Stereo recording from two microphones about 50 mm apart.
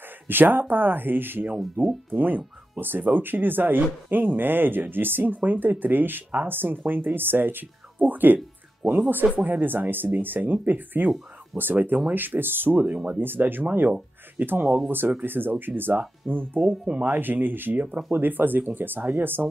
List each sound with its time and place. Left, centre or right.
0.3 s speech: right
8.8 s speech: centre
9.4 s speech: right
12.8 s speech: right
13.2 s speech: right
16.8 s speech: right
17.2 s speech: right